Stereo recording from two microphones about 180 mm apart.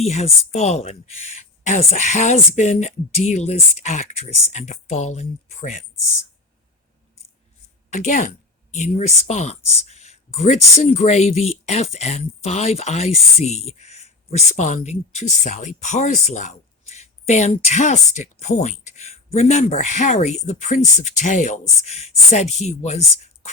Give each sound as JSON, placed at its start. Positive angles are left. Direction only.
{"t": 0.0, "sound": "speech", "side_deg": 40}
{"t": 7.9, "sound": "a woman's voice", "side_deg": 40}